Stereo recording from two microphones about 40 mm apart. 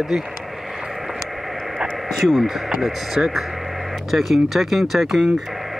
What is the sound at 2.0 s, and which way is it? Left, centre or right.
Speech, centre.